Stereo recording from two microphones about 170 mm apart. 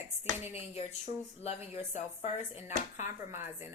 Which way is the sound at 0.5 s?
40° left (ahead or behind).